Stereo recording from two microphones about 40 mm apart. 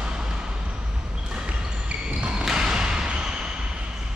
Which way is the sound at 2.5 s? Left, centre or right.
Centre.